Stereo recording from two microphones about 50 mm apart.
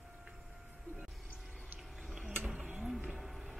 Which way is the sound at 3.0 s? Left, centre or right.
Centre.